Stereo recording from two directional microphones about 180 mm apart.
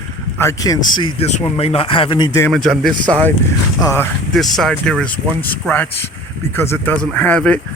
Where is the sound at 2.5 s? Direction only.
Centre (ahead or behind).